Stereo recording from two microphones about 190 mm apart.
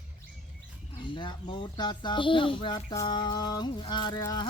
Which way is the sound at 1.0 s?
25° left (ahead or behind).